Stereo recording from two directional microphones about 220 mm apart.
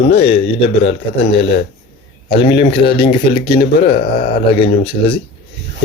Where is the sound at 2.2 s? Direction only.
25° left (ahead or behind).